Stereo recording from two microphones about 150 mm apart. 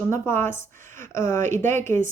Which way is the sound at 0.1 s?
15° left (ahead or behind).